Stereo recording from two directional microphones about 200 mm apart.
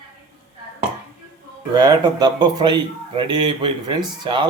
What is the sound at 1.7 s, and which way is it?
A man's voice, 20° right (ahead or behind).